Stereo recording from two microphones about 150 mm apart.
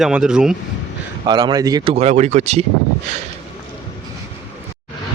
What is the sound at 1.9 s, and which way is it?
Speech, 45° right (ahead or behind).